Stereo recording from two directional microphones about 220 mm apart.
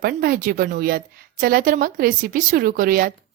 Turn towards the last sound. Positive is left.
turn(degrees=-40)  # may be behind; listen again after turning